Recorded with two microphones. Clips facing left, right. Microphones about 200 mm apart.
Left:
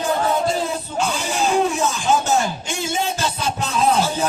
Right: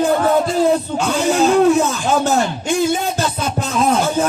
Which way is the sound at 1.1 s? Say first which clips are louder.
Right 9 dB; 65° right (ahead or behind).